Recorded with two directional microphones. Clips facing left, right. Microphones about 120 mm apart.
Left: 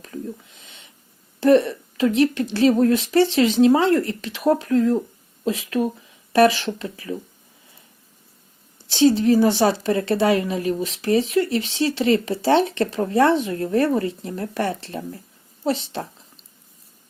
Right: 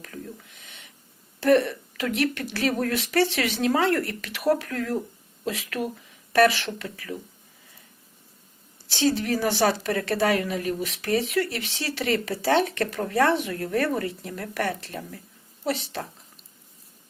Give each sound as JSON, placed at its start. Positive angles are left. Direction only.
{"t": 0.0, "sound": "a sound", "side_deg": 20}
{"t": 1.4, "sound": "a woman's voice", "side_deg": 25}
{"t": 8.9, "sound": "a woman's voice", "side_deg": 20}